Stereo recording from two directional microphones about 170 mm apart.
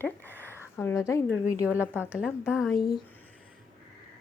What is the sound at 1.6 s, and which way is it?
Speech, 10° right (ahead or behind).